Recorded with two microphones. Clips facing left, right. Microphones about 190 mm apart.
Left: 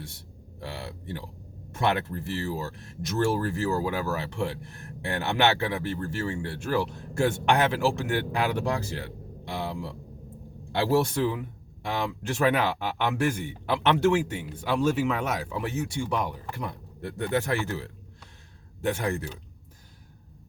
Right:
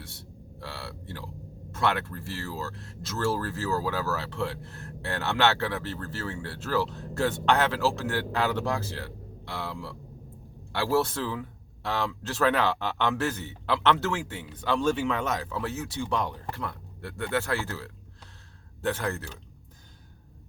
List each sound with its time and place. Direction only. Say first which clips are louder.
0.6 s speech: left 3 dB; 15° left (ahead or behind)